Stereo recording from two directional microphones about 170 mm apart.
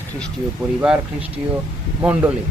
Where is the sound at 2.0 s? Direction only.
10° right (ahead or behind).